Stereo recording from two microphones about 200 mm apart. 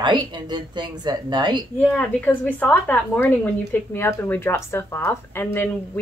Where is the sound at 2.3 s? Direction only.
10° left (ahead or behind).